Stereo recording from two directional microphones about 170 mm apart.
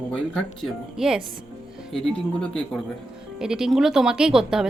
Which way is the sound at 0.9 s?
5° right (ahead or behind).